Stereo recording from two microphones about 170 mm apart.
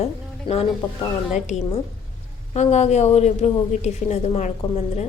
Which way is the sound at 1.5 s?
40° left (ahead or behind).